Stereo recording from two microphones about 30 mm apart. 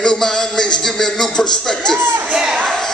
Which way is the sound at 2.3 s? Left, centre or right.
Centre.